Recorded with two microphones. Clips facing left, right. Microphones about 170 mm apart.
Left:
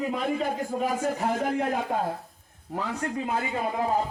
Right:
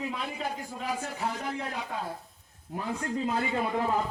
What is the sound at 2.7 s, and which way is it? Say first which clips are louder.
A woman's voice: left 2 dB; 85° left.